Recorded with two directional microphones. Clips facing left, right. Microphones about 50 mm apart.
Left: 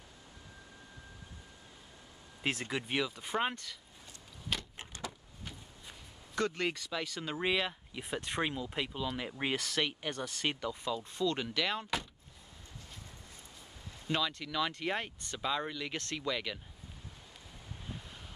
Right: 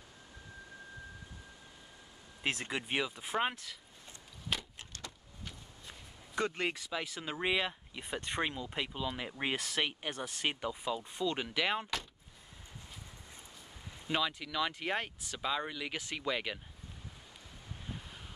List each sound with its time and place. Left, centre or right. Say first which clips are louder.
2.4 s speech: left 1 dB; centre
4.5 s a sound: even; centre
6.3 s speech: left 1 dB; centre
14.0 s speech: even; centre